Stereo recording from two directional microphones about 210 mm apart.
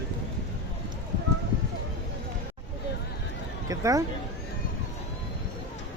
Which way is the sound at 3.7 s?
15° right (ahead or behind).